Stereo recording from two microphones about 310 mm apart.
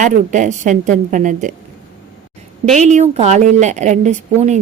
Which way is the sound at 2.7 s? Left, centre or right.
Right.